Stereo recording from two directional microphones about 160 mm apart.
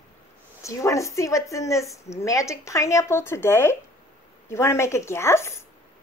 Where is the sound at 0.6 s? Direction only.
20° left (ahead or behind).